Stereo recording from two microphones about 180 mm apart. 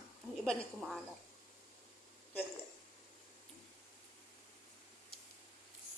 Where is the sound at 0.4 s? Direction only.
Centre (ahead or behind).